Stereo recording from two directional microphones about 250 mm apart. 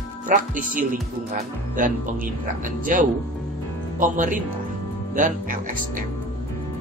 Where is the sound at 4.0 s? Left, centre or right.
Right.